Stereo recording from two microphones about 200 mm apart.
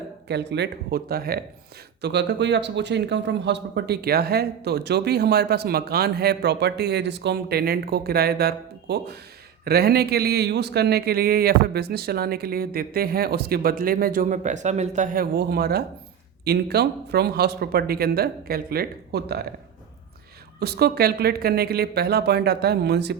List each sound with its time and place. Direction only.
0.3 s speech: 55° right (ahead or behind)
20.6 s speech: 55° right (ahead or behind)